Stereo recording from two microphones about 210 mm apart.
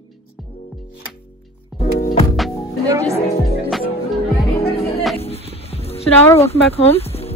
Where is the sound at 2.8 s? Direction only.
15° right (ahead or behind).